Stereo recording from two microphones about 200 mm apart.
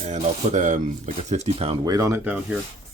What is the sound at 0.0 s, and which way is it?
Speech, 35° right (ahead or behind).